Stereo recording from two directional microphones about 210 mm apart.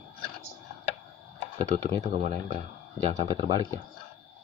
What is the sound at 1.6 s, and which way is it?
Speech, 35° right (ahead or behind).